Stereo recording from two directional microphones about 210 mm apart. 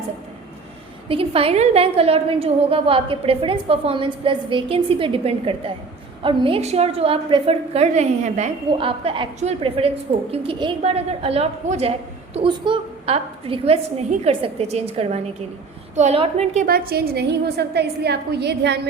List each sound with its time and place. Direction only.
1.0 s a woman's voice: 25° right (ahead or behind)
16.6 s a woman's voice: 45° right (ahead or behind)